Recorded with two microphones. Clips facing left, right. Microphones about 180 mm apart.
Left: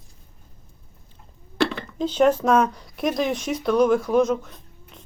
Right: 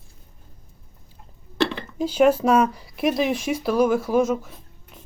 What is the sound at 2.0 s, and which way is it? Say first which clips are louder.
Speech: right 1 dB; 10° right (ahead or behind).